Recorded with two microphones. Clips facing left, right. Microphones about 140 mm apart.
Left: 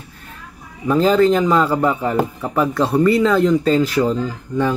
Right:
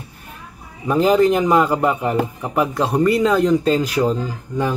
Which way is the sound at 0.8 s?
15° right (ahead or behind).